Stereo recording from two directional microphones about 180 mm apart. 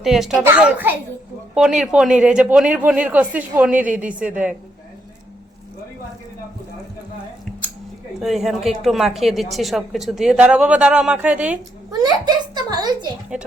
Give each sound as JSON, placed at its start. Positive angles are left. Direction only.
{"t": 0.0, "sound": "a child's voice", "side_deg": 0}
{"t": 8.2, "sound": "a woman's voice", "side_deg": 0}
{"t": 11.9, "sound": "a child's voice", "side_deg": -20}
{"t": 13.3, "sound": "speech", "side_deg": -5}